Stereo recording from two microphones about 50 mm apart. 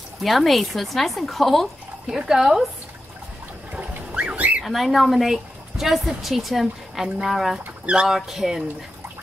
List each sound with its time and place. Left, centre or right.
0.2 s speech: centre
2.0 s speech: centre
3.7 s a sound: right
4.6 s speech: centre
7.8 s speech: centre
8.1 s speech: centre